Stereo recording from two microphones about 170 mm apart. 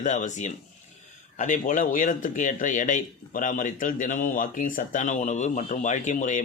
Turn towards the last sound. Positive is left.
turn(degrees=45)  # may be behind; listen again after turning